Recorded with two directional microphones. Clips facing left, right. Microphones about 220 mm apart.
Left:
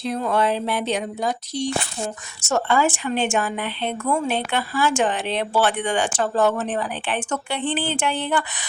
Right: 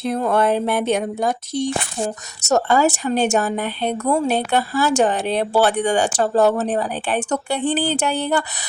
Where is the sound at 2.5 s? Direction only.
40° right (ahead or behind).